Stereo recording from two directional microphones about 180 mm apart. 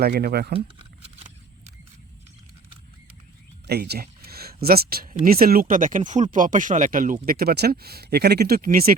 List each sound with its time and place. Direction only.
0.0 s speech: 60° right (ahead or behind)
0.5 s a sound: 35° right (ahead or behind)
3.7 s speech: 60° right (ahead or behind)